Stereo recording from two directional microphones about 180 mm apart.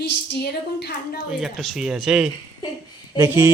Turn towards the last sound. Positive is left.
turn(degrees=-15)  # may be behind; listen again after turning